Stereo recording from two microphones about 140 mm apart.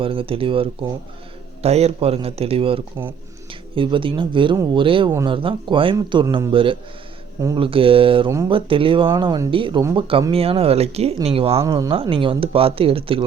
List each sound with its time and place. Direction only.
0.0 s speech: 40° right (ahead or behind)
11.7 s speech: 35° right (ahead or behind)